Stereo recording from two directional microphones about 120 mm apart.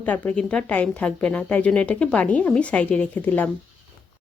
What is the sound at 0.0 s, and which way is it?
Speech, 10° left (ahead or behind).